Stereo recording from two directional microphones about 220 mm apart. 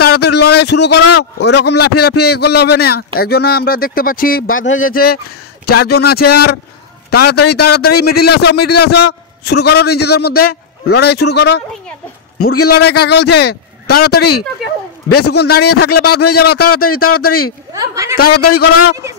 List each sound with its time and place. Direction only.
0.1 s a sound: 50° left (ahead or behind)
1.1 s a man's voice: 50° left (ahead or behind)
4.6 s speech: 65° left (ahead or behind)
4.9 s a man's voice: 45° left (ahead or behind)
12.8 s a man's voice: 50° left (ahead or behind)
15.0 s a man's voice: 90° left
15.3 s a man's voice: 45° left (ahead or behind)
16.9 s a man's voice: 85° left
17.7 s a woman's voice: 15° right (ahead or behind)
18.1 s a man's voice: 45° left (ahead or behind)